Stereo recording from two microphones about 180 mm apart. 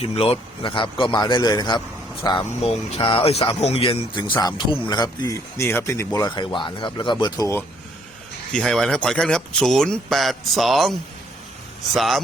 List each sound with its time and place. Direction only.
0.0 s a man's voice: 30° left (ahead or behind)
8.5 s speech: 5° left (ahead or behind)
11.9 s speech: centre (ahead or behind)